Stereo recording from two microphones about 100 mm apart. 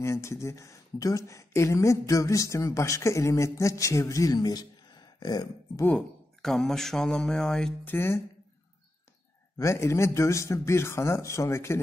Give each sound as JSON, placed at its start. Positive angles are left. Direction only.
{"t": 0.0, "sound": "speech", "side_deg": 30}
{"t": 5.9, "sound": "speech", "side_deg": 10}
{"t": 7.8, "sound": "speech", "side_deg": 20}
{"t": 9.6, "sound": "speech", "side_deg": 30}